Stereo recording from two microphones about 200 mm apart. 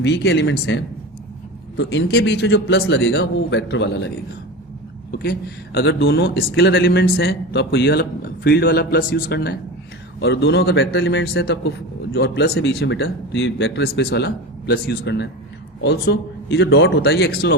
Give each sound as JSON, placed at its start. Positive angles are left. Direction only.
{"t": 0.0, "sound": "a man's voice", "side_deg": 60}
{"t": 5.2, "sound": "a man's voice", "side_deg": 50}